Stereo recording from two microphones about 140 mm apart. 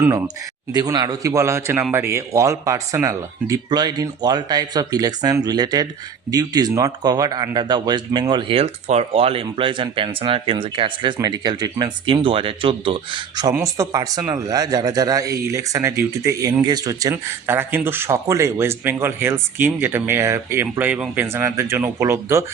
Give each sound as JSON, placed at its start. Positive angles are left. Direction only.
{"t": 0.7, "sound": "speech", "side_deg": -30}